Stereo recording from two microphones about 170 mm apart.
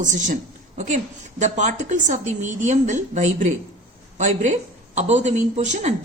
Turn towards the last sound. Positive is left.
turn(degrees=-45)  # may be behind; listen again after turning